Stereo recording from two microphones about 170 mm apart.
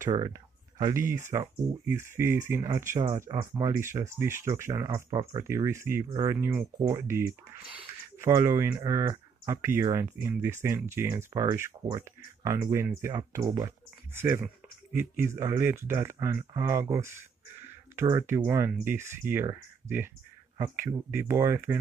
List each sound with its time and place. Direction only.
0.0 s speech: 20° right (ahead or behind)